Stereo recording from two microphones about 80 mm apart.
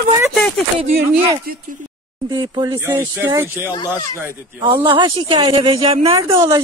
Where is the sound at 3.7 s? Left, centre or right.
Left.